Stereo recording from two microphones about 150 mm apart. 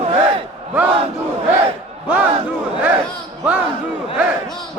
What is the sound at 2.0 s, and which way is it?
Speech, 10° right (ahead or behind).